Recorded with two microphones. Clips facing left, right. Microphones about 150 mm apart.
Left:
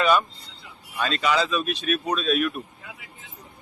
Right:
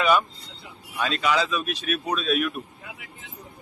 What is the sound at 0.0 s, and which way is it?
Vehicle, 5° right (ahead or behind).